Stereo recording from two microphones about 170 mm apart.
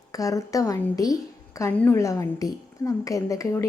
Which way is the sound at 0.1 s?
20° left (ahead or behind).